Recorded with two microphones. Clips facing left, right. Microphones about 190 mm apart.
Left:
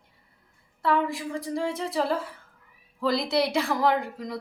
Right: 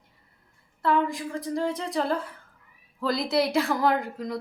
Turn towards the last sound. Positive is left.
turn(degrees=0)  # may be behind; listen again after turning